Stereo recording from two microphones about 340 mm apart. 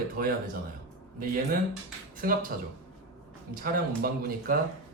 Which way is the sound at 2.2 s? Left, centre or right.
Right.